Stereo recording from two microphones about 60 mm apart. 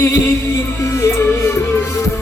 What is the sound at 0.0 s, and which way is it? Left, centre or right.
Music, left.